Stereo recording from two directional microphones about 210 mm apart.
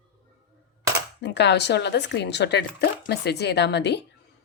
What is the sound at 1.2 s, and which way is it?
Speech, 55° left (ahead or behind).